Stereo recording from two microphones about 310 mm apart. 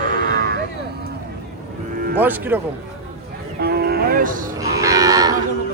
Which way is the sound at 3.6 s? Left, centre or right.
Right.